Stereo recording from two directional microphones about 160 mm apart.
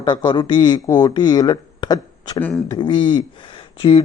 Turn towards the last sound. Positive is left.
turn(degrees=30)  # may be behind; listen again after turning